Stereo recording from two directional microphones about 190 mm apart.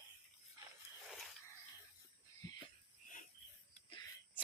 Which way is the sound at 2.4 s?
20° left (ahead or behind).